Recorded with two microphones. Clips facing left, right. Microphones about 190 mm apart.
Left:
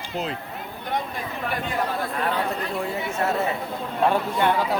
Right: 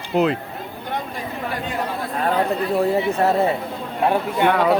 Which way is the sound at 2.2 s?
35° right (ahead or behind).